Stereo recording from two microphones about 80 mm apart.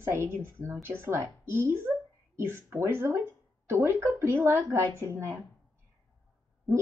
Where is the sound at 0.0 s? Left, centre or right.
Right.